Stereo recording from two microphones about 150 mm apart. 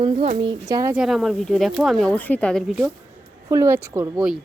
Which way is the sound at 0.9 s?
Centre (ahead or behind).